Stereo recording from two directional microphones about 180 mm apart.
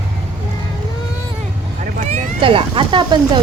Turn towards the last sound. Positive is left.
turn(degrees=-25)  # may be behind; listen again after turning